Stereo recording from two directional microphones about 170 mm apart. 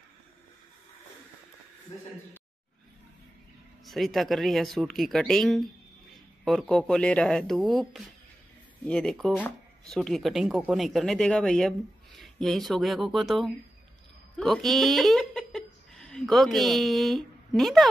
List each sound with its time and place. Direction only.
3.8 s speech: centre (ahead or behind)